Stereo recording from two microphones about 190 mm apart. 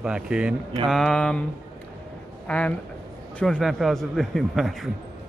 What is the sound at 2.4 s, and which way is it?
Speech, 5° left (ahead or behind).